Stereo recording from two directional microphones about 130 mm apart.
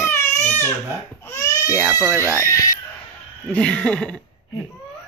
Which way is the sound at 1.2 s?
20° left (ahead or behind).